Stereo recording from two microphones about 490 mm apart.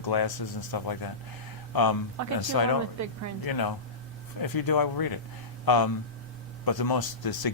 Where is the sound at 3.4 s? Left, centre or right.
Left.